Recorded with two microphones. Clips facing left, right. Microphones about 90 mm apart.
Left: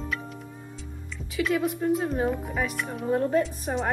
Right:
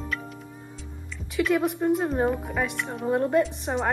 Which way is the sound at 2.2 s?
5° right (ahead or behind).